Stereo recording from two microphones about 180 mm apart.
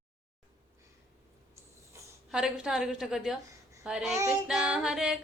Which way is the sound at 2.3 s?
5° right (ahead or behind).